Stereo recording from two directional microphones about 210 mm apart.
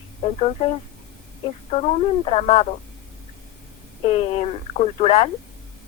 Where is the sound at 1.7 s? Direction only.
30° left (ahead or behind).